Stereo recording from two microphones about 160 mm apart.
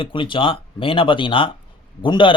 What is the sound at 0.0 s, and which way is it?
A man's voice, 30° left (ahead or behind).